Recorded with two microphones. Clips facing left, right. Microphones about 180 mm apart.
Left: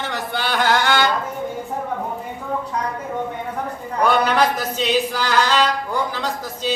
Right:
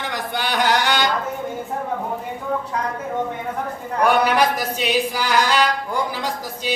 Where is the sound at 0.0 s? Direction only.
15° right (ahead or behind).